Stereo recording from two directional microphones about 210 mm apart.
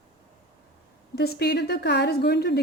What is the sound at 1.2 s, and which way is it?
A woman's voice, 50° left (ahead or behind).